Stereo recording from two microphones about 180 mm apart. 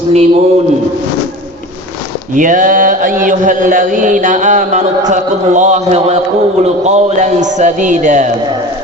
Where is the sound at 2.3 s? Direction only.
45° right (ahead or behind).